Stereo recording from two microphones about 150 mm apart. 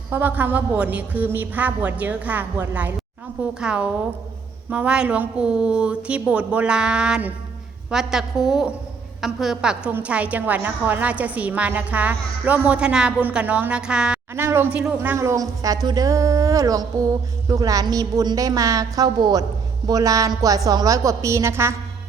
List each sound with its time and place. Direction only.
0.1 s a woman's voice: 10° right (ahead or behind)